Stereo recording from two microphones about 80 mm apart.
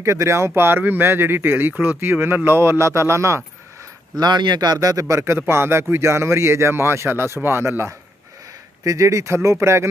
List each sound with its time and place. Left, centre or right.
0.0 s speech: right
4.2 s a man's voice: right
4.7 s speech: right